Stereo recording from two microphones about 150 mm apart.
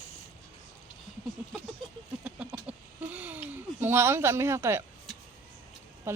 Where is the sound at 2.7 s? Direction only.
10° right (ahead or behind).